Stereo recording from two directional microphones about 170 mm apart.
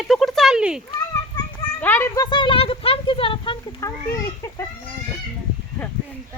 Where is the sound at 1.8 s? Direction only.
15° left (ahead or behind).